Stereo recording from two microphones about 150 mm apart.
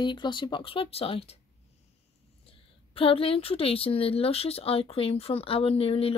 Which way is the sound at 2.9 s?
40° left (ahead or behind).